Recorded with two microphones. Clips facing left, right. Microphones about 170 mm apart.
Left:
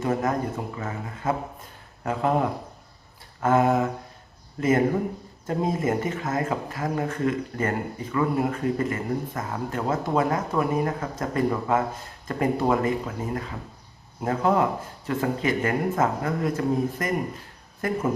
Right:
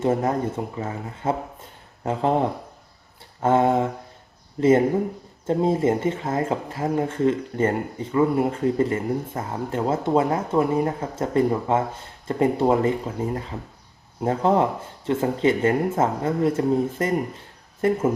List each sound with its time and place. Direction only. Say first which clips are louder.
0.0 s speech: right 3 dB; 30° right (ahead or behind)
5.5 s speech: right 5 dB; 30° right (ahead or behind)